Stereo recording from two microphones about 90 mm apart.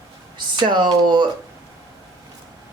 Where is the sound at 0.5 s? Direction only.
55° right (ahead or behind).